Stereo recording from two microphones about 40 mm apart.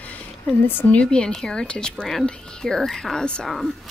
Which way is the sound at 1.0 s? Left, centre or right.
Centre.